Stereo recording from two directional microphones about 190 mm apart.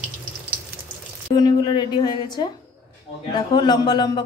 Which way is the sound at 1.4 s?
20° left (ahead or behind).